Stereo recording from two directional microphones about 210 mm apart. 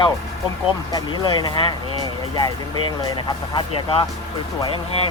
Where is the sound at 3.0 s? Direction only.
20° left (ahead or behind).